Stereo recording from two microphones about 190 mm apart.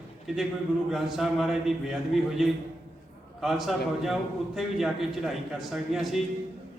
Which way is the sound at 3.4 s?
Centre (ahead or behind).